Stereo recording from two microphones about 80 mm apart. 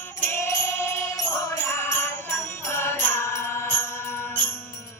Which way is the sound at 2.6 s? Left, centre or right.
Left.